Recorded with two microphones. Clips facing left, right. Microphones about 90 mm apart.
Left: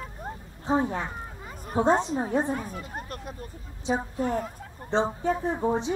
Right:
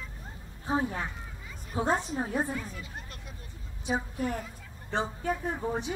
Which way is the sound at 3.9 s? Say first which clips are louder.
Left 4 dB; 25° left (ahead or behind).